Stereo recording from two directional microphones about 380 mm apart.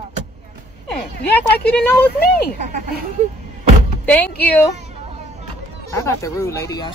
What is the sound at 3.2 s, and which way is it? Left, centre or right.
Speech, centre.